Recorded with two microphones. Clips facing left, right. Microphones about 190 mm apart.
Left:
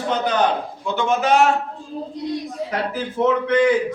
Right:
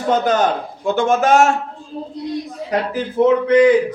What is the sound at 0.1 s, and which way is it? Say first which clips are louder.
A man's voice: right 4 dB; 45° right (ahead or behind).